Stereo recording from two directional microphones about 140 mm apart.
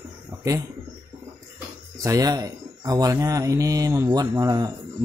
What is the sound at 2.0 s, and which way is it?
Speech, 25° right (ahead or behind).